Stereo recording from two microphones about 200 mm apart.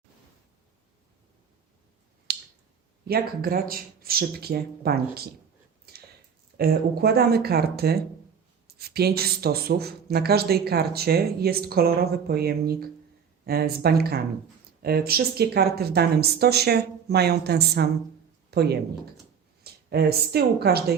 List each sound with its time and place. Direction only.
2.3 s a sound: 55° right (ahead or behind)
3.1 s speech: 50° right (ahead or behind)
6.6 s speech: 50° right (ahead or behind)